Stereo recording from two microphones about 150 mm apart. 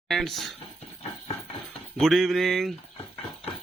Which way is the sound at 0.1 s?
Centre (ahead or behind).